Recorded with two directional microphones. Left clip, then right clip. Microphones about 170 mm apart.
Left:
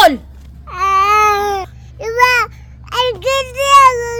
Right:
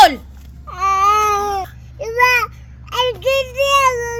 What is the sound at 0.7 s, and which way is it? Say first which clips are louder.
Baby cry: left 2 dB; 20° left (ahead or behind).